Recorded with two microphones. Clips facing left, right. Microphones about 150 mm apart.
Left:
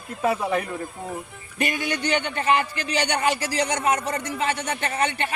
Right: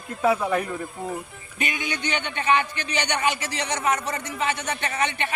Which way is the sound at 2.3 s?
35° left (ahead or behind).